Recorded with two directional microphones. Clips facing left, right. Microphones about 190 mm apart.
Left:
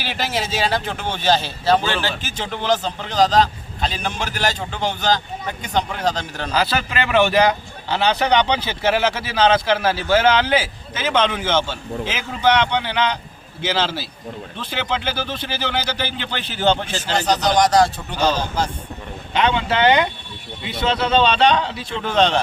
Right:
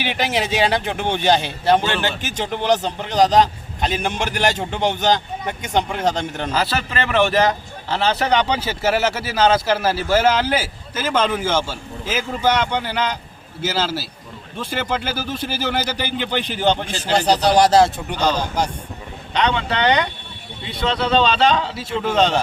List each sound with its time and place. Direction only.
0.0 s speech: 20° right (ahead or behind)
6.5 s a man's voice: centre (ahead or behind)
17.6 s speech: 25° right (ahead or behind)
18.3 s speech: 15° right (ahead or behind)
19.3 s a man's voice: 5° left (ahead or behind)